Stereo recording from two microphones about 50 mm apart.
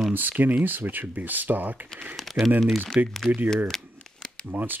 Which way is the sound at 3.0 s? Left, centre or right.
Right.